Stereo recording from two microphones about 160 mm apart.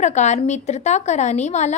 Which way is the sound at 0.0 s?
45° left (ahead or behind).